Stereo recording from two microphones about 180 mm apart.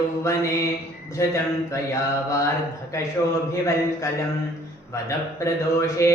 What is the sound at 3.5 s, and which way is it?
Music, 15° left (ahead or behind).